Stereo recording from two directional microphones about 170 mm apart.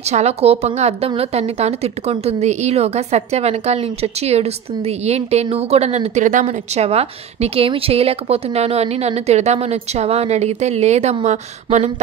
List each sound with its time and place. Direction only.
0.1 s a woman's voice: 40° right (ahead or behind)